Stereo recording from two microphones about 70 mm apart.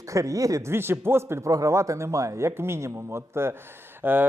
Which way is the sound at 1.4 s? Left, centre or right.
Right.